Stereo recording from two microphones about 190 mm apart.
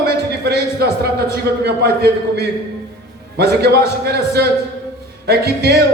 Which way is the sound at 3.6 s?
55° right (ahead or behind).